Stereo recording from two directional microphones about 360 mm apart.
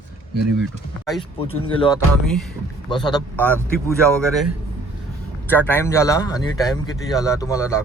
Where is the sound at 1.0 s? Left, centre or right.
Centre.